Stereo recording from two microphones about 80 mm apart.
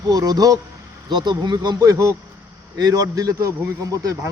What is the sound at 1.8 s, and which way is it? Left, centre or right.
Speech, right.